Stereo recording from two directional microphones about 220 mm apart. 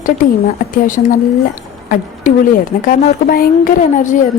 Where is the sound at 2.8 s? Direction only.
40° left (ahead or behind).